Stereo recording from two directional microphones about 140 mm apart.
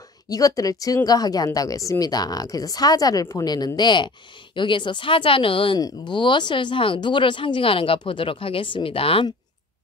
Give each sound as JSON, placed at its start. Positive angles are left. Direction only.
{"t": 0.3, "sound": "speech", "side_deg": 25}